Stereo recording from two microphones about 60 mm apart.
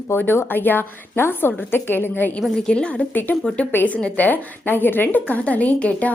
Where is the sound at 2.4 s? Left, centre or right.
Centre.